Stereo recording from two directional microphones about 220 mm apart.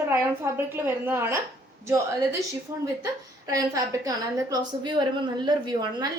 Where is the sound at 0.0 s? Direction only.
10° right (ahead or behind).